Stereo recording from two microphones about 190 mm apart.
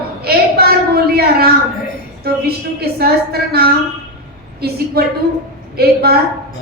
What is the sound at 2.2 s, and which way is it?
A woman's voice, 55° right (ahead or behind).